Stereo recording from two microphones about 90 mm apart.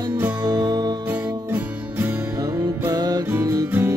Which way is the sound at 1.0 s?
20° right (ahead or behind).